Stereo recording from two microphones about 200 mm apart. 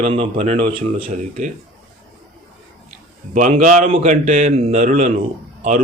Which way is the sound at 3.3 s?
35° right (ahead or behind).